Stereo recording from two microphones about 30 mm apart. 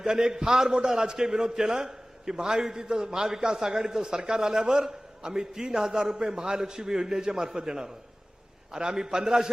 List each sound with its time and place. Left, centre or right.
0.1 s a man's voice: right